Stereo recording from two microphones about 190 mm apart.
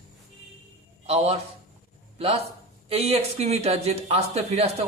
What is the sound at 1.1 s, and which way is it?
Speech, 30° right (ahead or behind).